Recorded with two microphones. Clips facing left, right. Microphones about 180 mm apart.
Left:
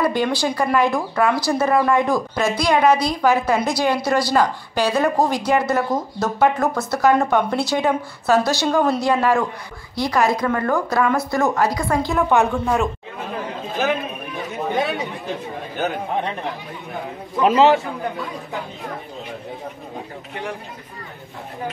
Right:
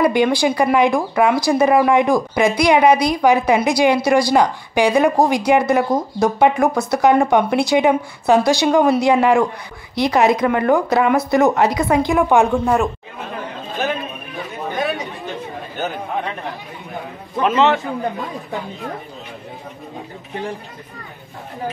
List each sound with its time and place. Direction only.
0.0 s speech: 15° right (ahead or behind)
17.4 s a man's voice: 35° left (ahead or behind)